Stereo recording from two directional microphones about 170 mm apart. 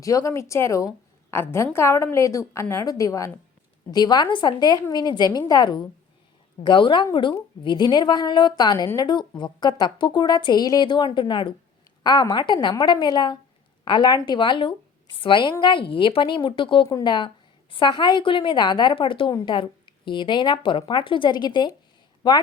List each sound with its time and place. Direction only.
0.0 s a woman's voice: 20° left (ahead or behind)